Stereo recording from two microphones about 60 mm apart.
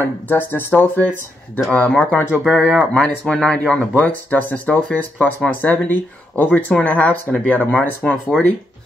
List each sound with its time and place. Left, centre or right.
0.0 s speech: left
1.7 s speech: left
2.4 s speech: centre
2.9 s speech: centre; by 7.9 s left
8.3 s speech: centre